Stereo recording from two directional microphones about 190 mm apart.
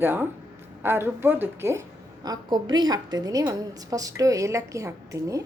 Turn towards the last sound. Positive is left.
turn(degrees=-15)  # may be behind; listen again after turning